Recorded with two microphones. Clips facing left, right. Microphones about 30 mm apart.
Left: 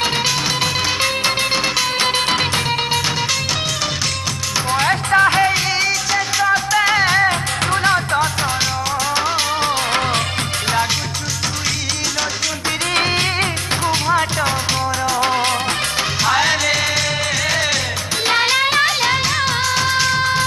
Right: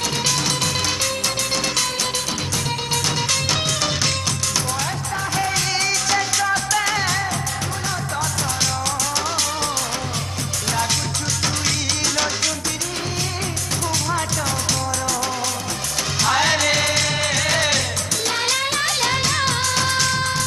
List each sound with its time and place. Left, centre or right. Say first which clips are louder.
0.6 s music: left 4 dB; left
4.8 s music: left 11 dB; left
5.8 s music: left 2 dB; centre
7.2 s music: left 7 dB; left
9.1 s music: left 5 dB; left
12.9 s music: left 9 dB; left
13.8 s music: left 6 dB; left
15.1 s music: left 7 dB; left
16.2 s music: left 1 dB; centre
18.2 s music: left 7 dB; left
18.9 s music: left 3 dB; centre